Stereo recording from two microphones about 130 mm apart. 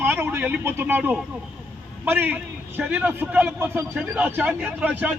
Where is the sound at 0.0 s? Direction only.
15° right (ahead or behind).